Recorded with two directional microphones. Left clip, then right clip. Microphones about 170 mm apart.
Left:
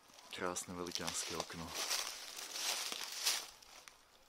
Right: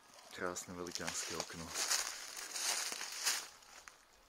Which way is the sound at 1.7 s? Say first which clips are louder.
Right 2 dB; 15° right (ahead or behind).